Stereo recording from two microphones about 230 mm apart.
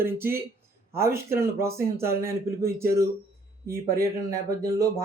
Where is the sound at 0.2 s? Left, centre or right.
Centre.